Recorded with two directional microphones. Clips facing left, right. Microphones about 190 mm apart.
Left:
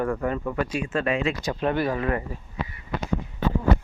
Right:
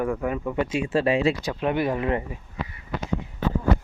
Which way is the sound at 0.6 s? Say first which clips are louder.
Right 3 dB; 25° right (ahead or behind).